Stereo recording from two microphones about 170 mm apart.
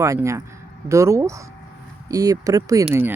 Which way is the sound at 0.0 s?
15° right (ahead or behind).